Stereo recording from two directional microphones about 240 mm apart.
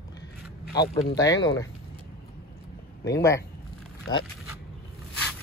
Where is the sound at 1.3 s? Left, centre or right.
Left.